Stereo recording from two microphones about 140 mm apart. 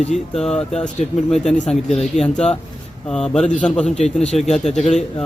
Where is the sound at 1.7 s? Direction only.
Centre (ahead or behind).